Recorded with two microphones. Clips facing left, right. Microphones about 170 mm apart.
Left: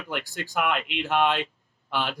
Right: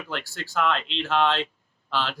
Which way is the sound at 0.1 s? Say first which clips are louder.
Left 2 dB; 15° left (ahead or behind).